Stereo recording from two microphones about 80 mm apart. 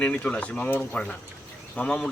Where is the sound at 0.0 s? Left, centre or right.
Centre.